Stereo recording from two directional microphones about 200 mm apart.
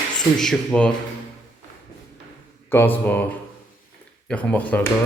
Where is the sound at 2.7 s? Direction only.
10° left (ahead or behind).